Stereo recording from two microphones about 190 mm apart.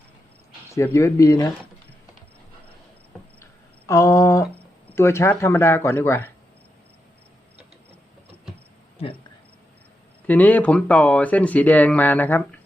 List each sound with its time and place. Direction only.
0.7 s speech: 15° left (ahead or behind)
3.4 s a sound: 15° left (ahead or behind)
4.9 s speech: 15° left (ahead or behind)
10.2 s speech: 10° left (ahead or behind)